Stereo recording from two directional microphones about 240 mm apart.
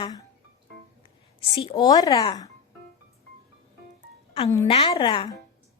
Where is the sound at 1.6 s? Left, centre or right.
Centre.